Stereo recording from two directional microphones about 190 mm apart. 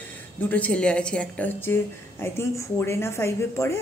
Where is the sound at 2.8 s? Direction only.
15° left (ahead or behind).